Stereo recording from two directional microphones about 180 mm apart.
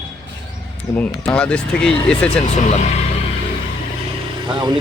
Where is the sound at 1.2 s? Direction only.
5° left (ahead or behind).